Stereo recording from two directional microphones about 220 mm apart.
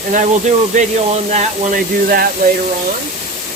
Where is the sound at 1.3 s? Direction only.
40° right (ahead or behind).